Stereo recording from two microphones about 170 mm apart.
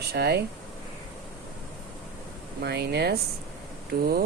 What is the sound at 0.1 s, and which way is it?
Speech, 70° right (ahead or behind).